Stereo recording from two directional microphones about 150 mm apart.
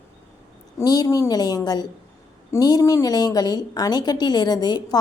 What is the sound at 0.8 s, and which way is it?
A woman's voice, 25° left (ahead or behind).